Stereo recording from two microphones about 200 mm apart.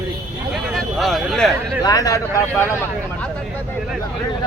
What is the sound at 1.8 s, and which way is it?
Speech, 15° left (ahead or behind).